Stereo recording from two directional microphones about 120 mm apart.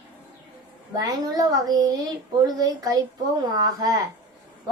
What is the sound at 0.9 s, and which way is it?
A child's voice, 35° right (ahead or behind).